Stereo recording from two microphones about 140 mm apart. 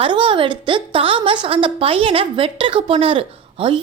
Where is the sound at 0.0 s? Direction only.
40° right (ahead or behind).